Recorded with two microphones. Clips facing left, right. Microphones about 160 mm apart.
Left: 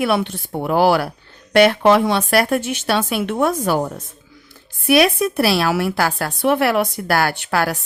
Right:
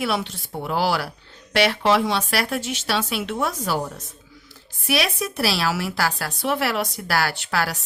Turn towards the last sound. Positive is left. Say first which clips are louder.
# left 5 dB
turn(degrees=55)  # may be behind; listen again after turning